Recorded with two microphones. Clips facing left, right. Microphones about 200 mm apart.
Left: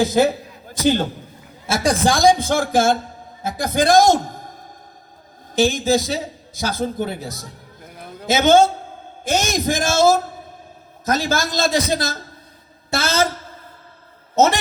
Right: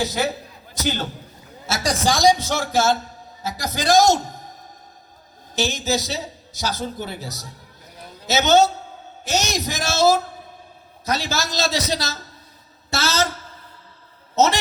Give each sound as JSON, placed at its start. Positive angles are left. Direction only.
{"t": 0.0, "sound": "a man's voice", "side_deg": 50}
{"t": 1.7, "sound": "a man's voice", "side_deg": 55}
{"t": 5.5, "sound": "a man's voice", "side_deg": 50}
{"t": 14.3, "sound": "a man's voice", "side_deg": 50}